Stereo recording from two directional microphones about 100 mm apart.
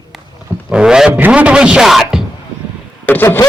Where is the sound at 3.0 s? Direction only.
20° left (ahead or behind).